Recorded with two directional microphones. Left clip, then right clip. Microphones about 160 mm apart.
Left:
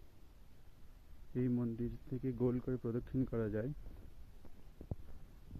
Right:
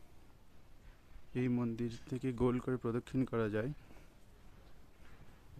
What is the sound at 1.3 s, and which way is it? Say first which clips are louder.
Speech: right 2 dB; 15° right (ahead or behind).